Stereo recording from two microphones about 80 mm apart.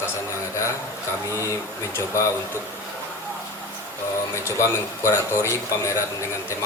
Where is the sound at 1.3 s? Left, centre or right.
Left.